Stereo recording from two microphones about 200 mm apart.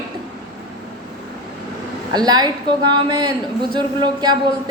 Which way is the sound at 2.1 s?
20° right (ahead or behind).